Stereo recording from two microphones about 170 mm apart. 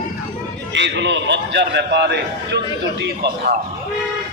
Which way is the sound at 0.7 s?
90° right.